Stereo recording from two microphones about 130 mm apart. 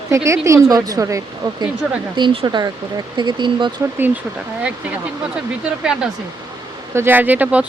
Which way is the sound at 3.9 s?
15° right (ahead or behind).